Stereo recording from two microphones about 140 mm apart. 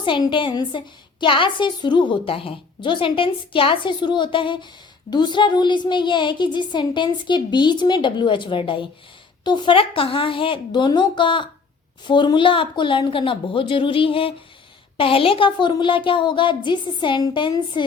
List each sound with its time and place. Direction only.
0.0 s a woman's voice: 35° left (ahead or behind)